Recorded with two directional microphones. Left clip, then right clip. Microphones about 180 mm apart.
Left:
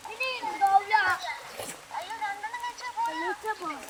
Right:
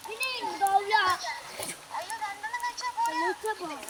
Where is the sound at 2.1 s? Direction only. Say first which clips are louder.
Left 2 dB; 70° right (ahead or behind).